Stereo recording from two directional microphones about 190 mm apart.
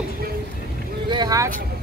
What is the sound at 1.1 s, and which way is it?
Vehicle, 20° right (ahead or behind).